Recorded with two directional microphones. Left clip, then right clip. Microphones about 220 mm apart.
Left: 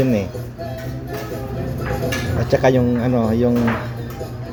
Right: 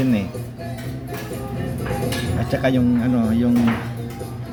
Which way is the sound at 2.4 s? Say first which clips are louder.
Left 6 dB; centre (ahead or behind).